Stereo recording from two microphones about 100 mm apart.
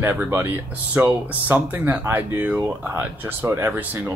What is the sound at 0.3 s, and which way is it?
Speech, 20° right (ahead or behind).